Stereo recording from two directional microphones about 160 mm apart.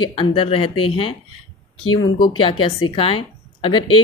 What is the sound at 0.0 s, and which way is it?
A woman's voice, 30° left (ahead or behind).